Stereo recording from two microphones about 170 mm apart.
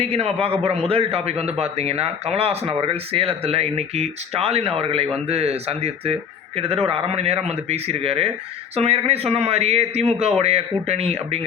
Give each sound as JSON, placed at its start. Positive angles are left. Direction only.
{"t": 0.0, "sound": "speech", "side_deg": -35}